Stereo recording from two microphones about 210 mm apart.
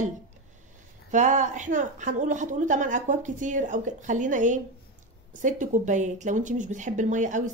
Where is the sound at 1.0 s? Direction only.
35° right (ahead or behind).